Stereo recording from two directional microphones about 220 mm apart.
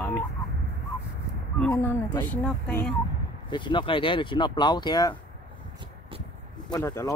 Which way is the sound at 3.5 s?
20° left (ahead or behind).